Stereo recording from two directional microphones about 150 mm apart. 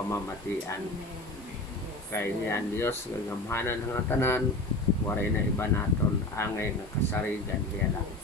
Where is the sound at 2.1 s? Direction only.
15° left (ahead or behind).